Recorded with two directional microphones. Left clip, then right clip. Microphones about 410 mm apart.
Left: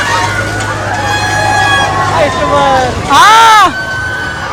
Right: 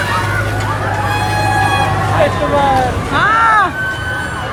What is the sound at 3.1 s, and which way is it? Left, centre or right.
Speech, centre.